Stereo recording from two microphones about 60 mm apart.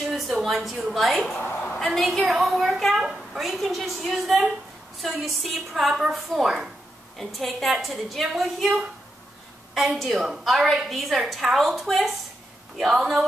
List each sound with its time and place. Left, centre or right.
0.0 s a woman's voice: centre
1.5 s a sound: left
1.8 s a woman's voice: centre